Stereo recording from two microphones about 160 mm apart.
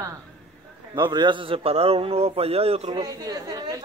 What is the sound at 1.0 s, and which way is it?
A man's voice, 30° right (ahead or behind).